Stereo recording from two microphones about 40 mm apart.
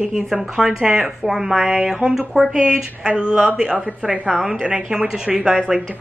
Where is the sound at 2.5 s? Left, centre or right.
Right.